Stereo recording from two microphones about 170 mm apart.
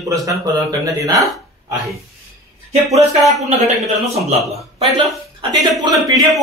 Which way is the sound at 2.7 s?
40° right (ahead or behind).